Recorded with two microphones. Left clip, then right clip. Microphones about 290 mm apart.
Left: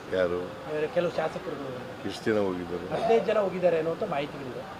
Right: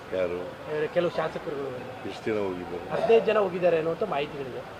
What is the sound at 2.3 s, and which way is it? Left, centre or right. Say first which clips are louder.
Speech: left 2 dB; left.